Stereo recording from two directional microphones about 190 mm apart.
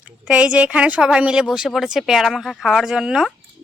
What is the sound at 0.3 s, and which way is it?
Speech, 5° right (ahead or behind).